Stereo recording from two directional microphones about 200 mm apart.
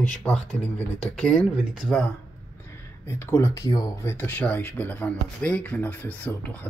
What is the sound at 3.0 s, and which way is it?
Speech, 15° left (ahead or behind).